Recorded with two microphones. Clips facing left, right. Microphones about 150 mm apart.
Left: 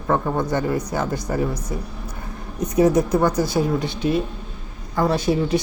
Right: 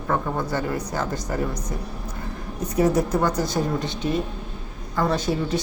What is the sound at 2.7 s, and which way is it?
A woman's voice, 10° left (ahead or behind).